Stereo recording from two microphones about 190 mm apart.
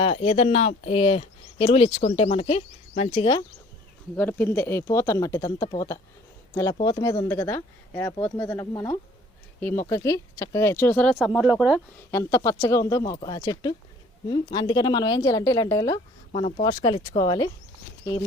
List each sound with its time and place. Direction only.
0.0 s speech: 30° left (ahead or behind)
4.2 s a woman's voice: 10° left (ahead or behind)
11.3 s speech: 5° right (ahead or behind)
12.1 s a woman's voice: 15° left (ahead or behind)